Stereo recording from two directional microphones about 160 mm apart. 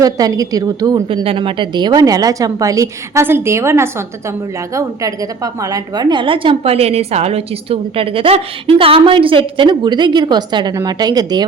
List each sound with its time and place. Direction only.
0.0 s a woman's voice: 20° right (ahead or behind)